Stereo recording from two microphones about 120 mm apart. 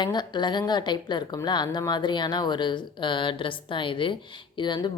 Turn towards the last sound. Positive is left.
turn(degrees=40)  # may be behind; listen again after turning